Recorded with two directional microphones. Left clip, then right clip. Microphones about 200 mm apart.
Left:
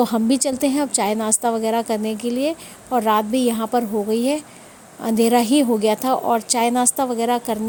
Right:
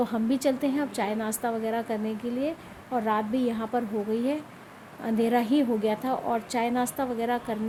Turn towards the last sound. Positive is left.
turn(degrees=45)  # may be behind; listen again after turning